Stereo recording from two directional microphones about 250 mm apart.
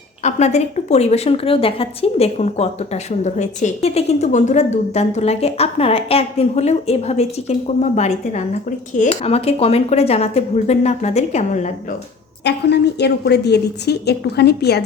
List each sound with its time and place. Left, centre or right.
0.2 s a woman's voice: left
12.5 s a woman's voice: left